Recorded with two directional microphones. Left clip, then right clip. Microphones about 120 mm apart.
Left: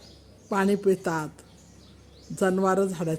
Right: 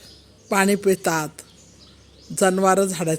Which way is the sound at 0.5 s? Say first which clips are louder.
Right 5 dB; 15° right (ahead or behind).